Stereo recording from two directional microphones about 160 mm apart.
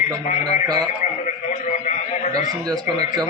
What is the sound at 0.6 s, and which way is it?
Speech, 25° right (ahead or behind).